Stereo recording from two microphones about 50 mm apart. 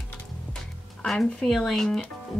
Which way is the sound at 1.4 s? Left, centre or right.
Centre.